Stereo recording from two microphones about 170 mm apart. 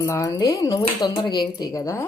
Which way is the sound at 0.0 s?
20° left (ahead or behind).